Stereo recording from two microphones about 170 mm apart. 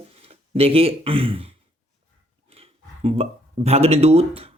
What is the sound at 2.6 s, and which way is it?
Speech, 35° right (ahead or behind).